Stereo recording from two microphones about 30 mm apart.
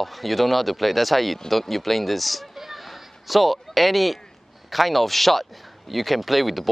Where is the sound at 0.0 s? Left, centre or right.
Centre.